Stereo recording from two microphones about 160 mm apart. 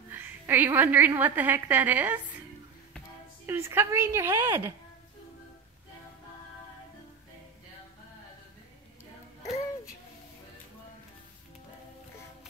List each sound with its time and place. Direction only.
0.1 s a woman's voice: 10° right (ahead or behind)
3.4 s a woman's voice: 15° right (ahead or behind)